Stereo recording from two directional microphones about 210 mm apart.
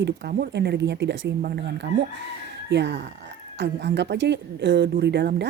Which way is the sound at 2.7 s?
55° right (ahead or behind).